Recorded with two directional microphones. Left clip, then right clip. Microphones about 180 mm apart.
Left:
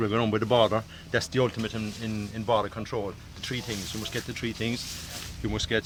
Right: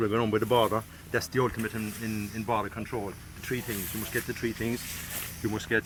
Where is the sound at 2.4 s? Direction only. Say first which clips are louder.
Left 5 dB; 40° left (ahead or behind).